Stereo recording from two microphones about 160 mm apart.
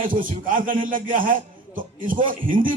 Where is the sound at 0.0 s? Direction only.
60° right (ahead or behind).